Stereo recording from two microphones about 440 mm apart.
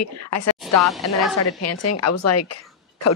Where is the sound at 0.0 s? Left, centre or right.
Left.